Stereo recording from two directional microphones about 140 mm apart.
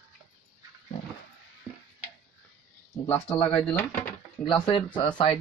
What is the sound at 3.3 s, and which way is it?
Speech, 40° left (ahead or behind).